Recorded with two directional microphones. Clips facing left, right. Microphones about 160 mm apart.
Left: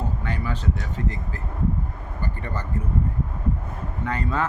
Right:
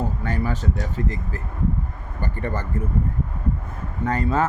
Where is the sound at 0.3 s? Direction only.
40° right (ahead or behind).